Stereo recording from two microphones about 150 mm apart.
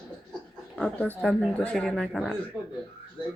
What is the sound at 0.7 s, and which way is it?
A man's voice, 10° left (ahead or behind).